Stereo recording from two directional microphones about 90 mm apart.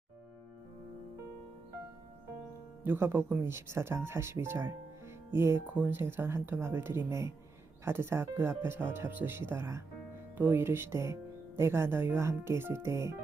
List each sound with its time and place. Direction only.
2.8 s speech: 25° right (ahead or behind)